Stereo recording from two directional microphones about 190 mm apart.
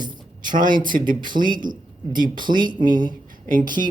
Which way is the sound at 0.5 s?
45° right (ahead or behind).